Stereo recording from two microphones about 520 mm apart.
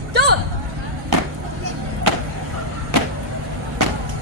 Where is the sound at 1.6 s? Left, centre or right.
Right.